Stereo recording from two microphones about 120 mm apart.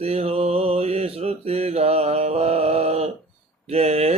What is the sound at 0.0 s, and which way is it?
Mantra, 60° right (ahead or behind).